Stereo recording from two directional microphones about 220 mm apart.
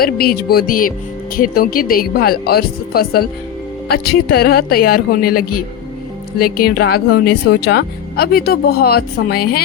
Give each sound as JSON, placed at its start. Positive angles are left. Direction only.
{"t": 0.0, "sound": "a woman's voice", "side_deg": 45}